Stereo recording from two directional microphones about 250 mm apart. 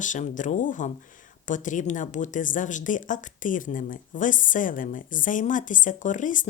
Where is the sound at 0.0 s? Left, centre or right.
Left.